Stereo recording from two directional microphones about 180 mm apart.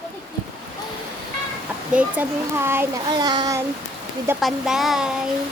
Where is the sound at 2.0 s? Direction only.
10° right (ahead or behind).